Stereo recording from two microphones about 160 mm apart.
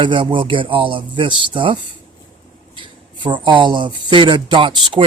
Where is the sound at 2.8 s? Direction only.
30° right (ahead or behind).